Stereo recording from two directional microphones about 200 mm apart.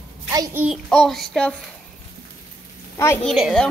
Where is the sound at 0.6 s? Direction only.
Centre (ahead or behind).